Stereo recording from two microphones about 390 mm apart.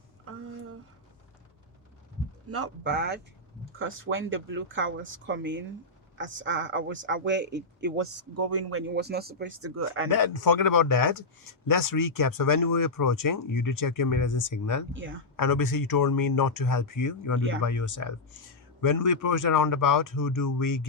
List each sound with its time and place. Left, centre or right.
0.3 s a sound: right
2.5 s speech: right
10.1 s speech: left
14.9 s speech: right
15.4 s speech: left